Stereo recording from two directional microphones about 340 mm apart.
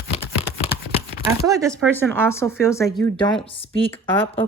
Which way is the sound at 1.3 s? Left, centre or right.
Centre.